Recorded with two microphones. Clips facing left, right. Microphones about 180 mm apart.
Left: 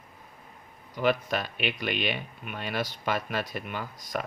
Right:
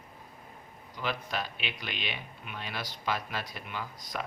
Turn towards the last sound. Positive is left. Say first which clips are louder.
# left 4 dB
turn(degrees=50)  # may be behind; listen again after turning